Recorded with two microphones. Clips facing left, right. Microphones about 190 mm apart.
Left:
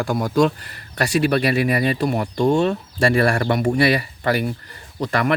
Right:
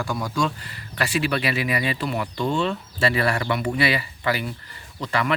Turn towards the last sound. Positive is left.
turn(degrees=50)  # may be behind; listen again after turning